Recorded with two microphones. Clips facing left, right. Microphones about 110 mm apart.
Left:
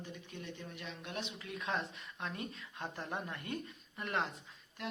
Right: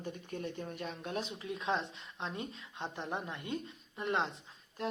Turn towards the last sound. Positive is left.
turn(degrees=-35)  # may be behind; listen again after turning